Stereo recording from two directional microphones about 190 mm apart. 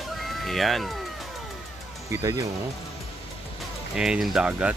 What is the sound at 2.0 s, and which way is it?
Speech, 15° right (ahead or behind).